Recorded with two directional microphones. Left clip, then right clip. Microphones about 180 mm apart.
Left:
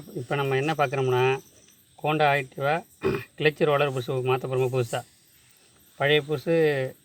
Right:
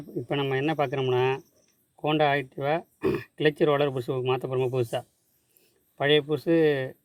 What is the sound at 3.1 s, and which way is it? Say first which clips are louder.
Speech: left 1 dB; 40° right (ahead or behind).